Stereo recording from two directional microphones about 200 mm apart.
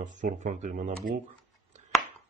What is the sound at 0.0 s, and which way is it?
Speech, 40° right (ahead or behind).